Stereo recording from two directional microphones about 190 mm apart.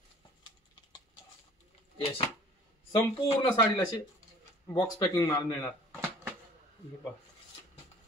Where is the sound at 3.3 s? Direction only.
20° left (ahead or behind).